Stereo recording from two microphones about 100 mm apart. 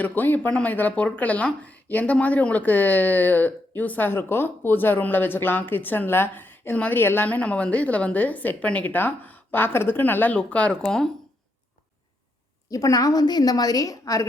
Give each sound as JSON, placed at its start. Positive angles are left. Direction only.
{"t": 0.0, "sound": "speech", "side_deg": 20}
{"t": 12.7, "sound": "a woman's voice", "side_deg": 35}